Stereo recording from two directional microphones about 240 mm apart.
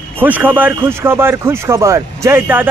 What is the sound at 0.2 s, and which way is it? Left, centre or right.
Speech, centre.